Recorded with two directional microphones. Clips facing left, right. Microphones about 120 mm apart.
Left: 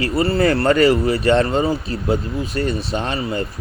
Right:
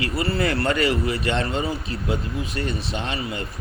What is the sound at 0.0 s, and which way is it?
Speech, 35° left (ahead or behind).